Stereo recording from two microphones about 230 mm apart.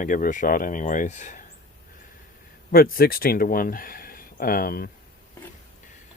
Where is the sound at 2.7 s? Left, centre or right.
Left.